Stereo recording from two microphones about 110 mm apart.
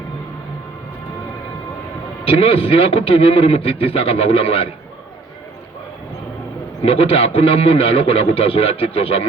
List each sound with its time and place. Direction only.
2.2 s a man's voice: 60° left (ahead or behind)
6.8 s a man's voice: 60° left (ahead or behind)